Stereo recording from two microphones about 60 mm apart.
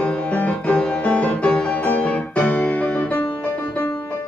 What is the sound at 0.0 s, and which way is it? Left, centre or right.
Music, left.